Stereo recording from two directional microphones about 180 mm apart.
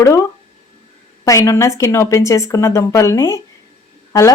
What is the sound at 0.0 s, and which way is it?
Speech, 15° left (ahead or behind).